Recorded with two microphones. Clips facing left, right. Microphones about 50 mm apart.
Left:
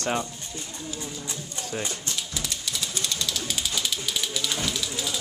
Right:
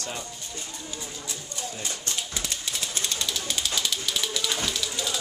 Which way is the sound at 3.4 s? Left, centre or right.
Centre.